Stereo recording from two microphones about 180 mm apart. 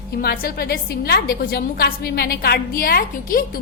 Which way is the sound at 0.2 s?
60° left (ahead or behind).